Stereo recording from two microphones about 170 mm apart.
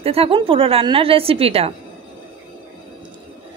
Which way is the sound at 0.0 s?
35° right (ahead or behind).